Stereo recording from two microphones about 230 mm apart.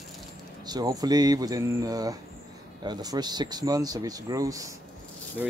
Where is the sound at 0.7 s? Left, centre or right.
Centre.